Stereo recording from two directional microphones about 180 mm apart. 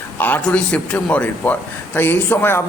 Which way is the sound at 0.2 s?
10° left (ahead or behind).